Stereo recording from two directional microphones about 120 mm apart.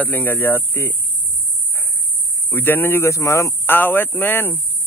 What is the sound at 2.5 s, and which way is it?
Speech, 15° left (ahead or behind).